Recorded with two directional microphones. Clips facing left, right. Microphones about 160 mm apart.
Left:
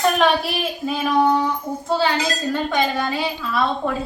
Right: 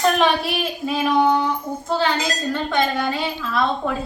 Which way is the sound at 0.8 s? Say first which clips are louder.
Even; centre (ahead or behind).